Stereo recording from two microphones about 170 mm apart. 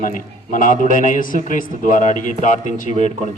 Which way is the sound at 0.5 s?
50° left (ahead or behind).